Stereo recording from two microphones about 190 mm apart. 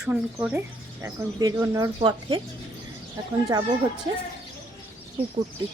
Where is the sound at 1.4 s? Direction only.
20° right (ahead or behind).